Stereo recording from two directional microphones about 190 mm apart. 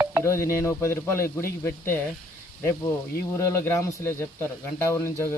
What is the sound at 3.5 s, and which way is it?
Speech, 15° left (ahead or behind).